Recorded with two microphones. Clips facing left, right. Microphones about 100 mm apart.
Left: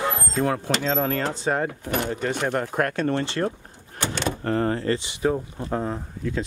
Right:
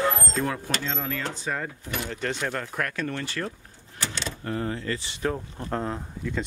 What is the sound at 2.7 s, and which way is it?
Speech, 35° left (ahead or behind).